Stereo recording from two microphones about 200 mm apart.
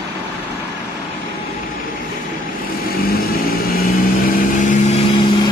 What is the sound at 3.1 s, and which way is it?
Vehicle, 45° left (ahead or behind).